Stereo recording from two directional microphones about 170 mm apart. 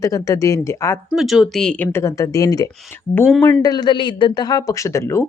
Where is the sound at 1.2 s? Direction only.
Centre (ahead or behind).